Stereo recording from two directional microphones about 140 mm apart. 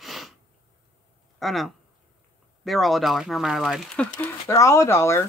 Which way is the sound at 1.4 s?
Centre (ahead or behind).